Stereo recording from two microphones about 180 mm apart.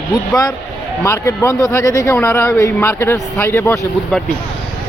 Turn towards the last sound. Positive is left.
turn(degrees=15)  # may be behind; listen again after turning